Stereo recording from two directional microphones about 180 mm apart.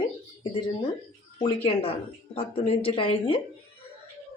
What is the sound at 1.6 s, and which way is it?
A woman's voice, 30° left (ahead or behind).